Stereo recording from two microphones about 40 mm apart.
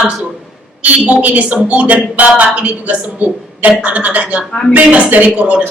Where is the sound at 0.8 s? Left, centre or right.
Right.